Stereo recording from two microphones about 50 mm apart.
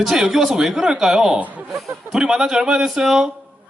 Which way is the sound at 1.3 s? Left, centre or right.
Right.